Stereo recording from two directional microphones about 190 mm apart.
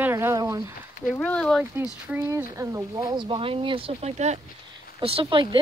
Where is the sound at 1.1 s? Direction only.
5° left (ahead or behind).